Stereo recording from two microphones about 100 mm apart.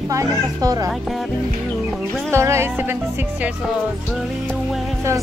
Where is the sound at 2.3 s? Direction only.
25° right (ahead or behind).